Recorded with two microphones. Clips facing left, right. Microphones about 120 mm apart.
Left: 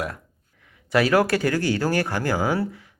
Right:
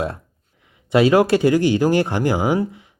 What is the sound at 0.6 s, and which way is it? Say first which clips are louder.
Speech: right 5 dB; 20° right (ahead or behind).